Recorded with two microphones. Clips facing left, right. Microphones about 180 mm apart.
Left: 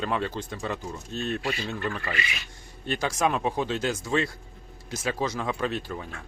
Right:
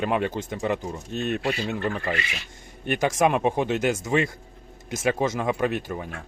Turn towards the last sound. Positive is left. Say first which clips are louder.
# right 4 dB
turn(degrees=-15)  # may be behind; listen again after turning